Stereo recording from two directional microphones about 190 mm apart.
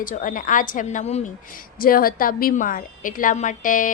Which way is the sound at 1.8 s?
50° left (ahead or behind).